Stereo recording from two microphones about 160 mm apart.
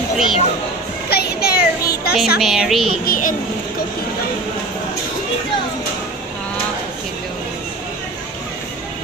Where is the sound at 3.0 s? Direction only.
60° left (ahead or behind).